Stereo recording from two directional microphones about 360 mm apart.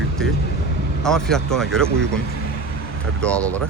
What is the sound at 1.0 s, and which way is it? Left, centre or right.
Speech, centre.